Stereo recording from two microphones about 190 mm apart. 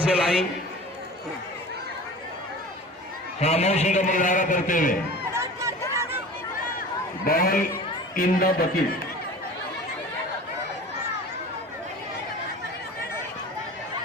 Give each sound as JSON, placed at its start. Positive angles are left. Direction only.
{"t": 0.0, "sound": "a man's voice", "side_deg": -5}
{"t": 3.4, "sound": "a man's voice", "side_deg": 35}
{"t": 5.3, "sound": "a sound", "side_deg": -15}
{"t": 7.3, "sound": "a man's voice", "side_deg": 50}